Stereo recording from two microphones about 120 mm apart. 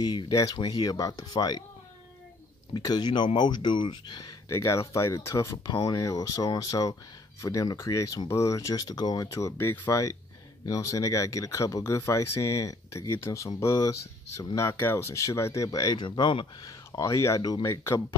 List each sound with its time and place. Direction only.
0.3 s speech: 30° left (ahead or behind)
2.7 s speech: 35° left (ahead or behind)
4.5 s speech: 25° left (ahead or behind); by 16.7 s 40° left (ahead or behind)
16.9 s speech: 25° left (ahead or behind)